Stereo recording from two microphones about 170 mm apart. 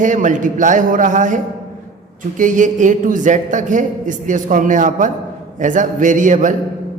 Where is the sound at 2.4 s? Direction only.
50° right (ahead or behind).